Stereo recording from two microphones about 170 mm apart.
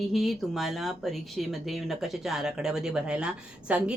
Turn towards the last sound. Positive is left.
turn(degrees=-5)  # may be behind; listen again after turning